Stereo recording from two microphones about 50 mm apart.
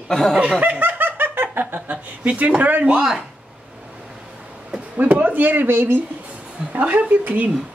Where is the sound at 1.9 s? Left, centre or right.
Right.